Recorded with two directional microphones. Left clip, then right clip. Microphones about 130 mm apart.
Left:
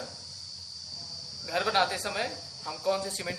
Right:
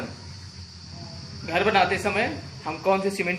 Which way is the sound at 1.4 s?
30° left (ahead or behind).